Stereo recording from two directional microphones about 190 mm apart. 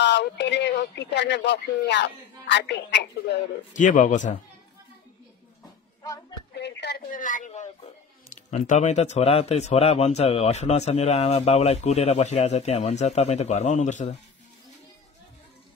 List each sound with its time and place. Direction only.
0.0 s speech: 65° left (ahead or behind)
3.7 s speech: 45° left (ahead or behind)
6.5 s a man's voice: 65° left (ahead or behind); by 14.1 s 40° left (ahead or behind)